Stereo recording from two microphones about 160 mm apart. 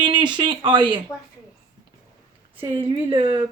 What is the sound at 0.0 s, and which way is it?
Speech, 30° right (ahead or behind).